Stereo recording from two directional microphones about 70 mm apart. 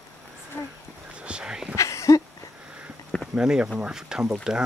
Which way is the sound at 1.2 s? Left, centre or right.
Centre.